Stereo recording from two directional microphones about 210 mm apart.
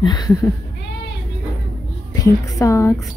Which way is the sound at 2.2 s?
15° left (ahead or behind).